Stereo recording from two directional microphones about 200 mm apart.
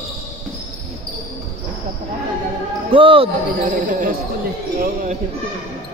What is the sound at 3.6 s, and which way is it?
Speech, 40° right (ahead or behind).